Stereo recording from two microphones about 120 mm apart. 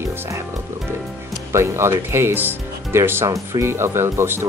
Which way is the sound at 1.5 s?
25° right (ahead or behind).